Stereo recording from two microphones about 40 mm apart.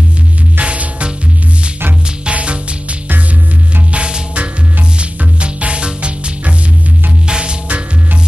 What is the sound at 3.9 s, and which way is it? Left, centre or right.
Music, right.